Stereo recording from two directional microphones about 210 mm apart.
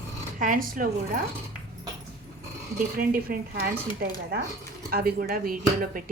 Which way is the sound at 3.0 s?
45° right (ahead or behind).